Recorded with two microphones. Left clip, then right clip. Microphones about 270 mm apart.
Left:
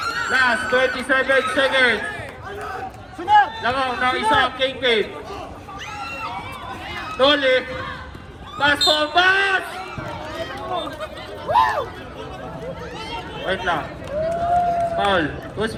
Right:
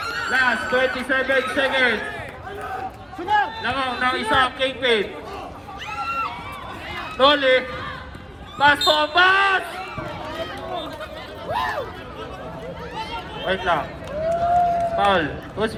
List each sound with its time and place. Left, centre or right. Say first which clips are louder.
0.2 s a man's voice: left 1 dB; left
3.2 s a sound: left 5 dB; left
3.6 s a man's voice: left 2 dB; centre
7.2 s speech: even; centre
11.5 s speech: left 8 dB; left
14.3 s run: right 1 dB; right